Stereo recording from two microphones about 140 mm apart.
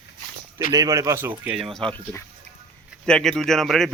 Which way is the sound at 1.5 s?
Centre (ahead or behind).